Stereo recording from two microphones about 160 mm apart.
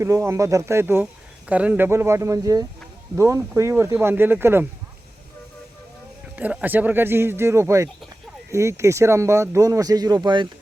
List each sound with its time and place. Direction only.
0.0 s speech: 20° right (ahead or behind)
6.3 s speech: 10° right (ahead or behind); by 10.5 s 25° right (ahead or behind)